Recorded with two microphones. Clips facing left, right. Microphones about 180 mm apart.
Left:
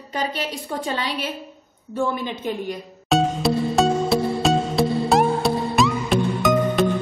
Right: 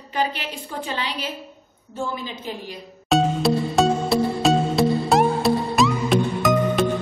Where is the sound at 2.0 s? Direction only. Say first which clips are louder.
Left 5 dB; 60° left (ahead or behind).